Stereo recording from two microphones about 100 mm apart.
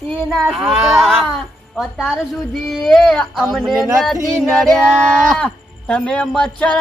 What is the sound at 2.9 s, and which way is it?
Speech, centre (ahead or behind).